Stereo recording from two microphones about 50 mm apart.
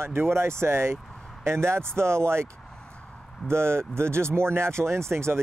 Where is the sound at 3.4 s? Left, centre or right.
Right.